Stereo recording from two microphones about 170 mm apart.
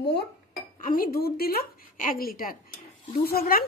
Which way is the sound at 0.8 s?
55° left (ahead or behind).